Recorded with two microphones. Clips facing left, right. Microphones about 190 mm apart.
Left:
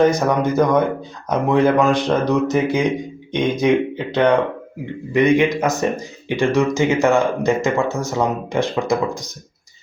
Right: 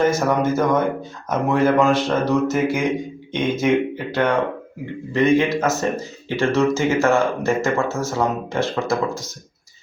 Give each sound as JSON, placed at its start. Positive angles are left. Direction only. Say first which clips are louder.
{"t": 0.0, "sound": "speech", "louder": "left 2 dB", "side_deg": 15}